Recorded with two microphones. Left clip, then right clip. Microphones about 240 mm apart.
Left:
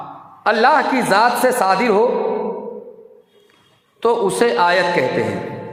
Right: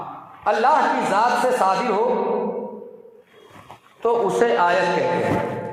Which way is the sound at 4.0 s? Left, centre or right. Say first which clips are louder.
Left 3 dB; left.